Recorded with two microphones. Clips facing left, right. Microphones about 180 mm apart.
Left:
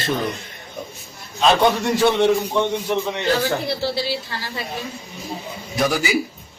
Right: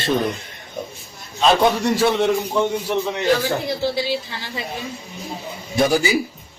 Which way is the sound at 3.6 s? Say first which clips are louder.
Right 1 dB; 15° right (ahead or behind).